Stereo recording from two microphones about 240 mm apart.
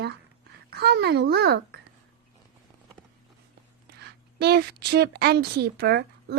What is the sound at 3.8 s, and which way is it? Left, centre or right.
A woman's voice, right.